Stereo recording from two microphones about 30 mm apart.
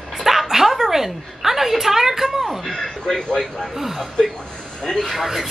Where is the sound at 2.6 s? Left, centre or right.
Centre.